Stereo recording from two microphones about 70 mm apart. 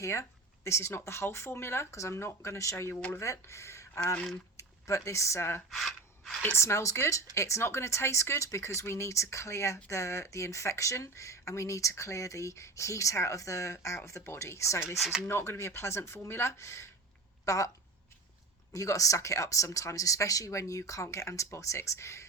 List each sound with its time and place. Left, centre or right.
0.0 s speech: left
4.0 s speech: centre
4.5 s speech: left
18.7 s speech: left